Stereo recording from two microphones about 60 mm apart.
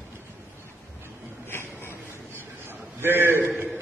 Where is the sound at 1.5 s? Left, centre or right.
Left.